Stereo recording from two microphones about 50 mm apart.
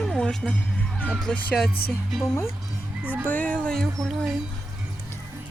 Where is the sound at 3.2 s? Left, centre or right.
Left.